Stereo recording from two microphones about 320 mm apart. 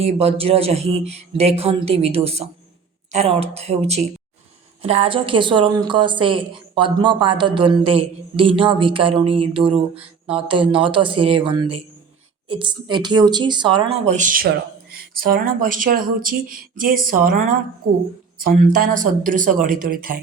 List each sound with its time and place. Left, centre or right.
0.0 s a woman's voice: centre